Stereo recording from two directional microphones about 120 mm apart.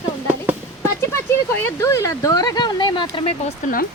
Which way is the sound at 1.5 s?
15° left (ahead or behind).